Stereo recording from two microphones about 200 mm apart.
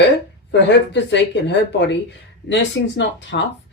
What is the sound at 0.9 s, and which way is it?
Speech, 60° left (ahead or behind).